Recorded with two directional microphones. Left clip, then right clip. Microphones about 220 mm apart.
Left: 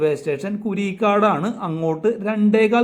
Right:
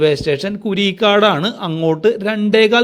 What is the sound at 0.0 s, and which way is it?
A man's voice, 25° right (ahead or behind).